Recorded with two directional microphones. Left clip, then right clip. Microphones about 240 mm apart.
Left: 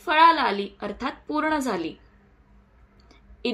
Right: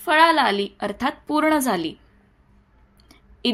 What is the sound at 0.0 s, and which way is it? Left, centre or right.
A woman's voice, right.